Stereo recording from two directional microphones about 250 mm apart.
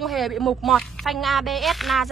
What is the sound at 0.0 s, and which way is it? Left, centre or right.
A woman's voice, centre.